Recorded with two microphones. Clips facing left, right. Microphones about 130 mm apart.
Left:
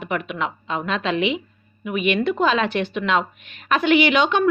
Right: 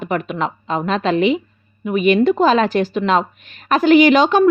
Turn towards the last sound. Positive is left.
turn(degrees=-40)  # may be behind; listen again after turning